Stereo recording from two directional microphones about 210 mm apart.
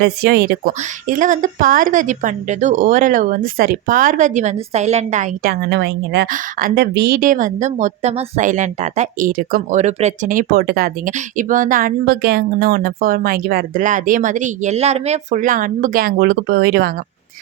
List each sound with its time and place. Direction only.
0.0 s a woman's voice: 45° right (ahead or behind)
6.2 s a woman's voice: 40° right (ahead or behind)